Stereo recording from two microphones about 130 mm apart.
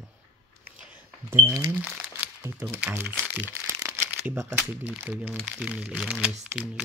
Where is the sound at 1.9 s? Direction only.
5° right (ahead or behind).